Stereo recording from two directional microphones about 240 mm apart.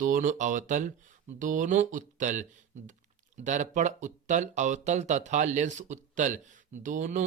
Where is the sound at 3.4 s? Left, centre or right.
Right.